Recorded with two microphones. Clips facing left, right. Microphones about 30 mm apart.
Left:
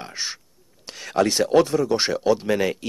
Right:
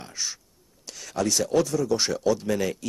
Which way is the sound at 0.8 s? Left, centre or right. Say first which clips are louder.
Left 6 dB; left.